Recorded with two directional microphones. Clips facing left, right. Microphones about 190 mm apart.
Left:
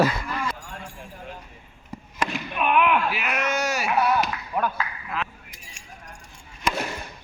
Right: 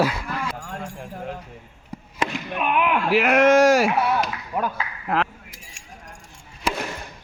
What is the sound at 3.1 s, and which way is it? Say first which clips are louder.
Speech: right 11 dB; 90° right.